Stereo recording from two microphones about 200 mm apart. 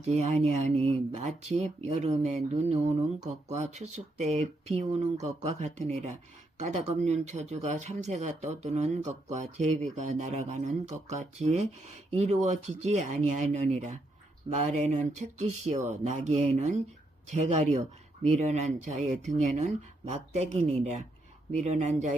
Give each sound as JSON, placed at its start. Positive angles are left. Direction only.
{"t": 0.0, "sound": "speech", "side_deg": -35}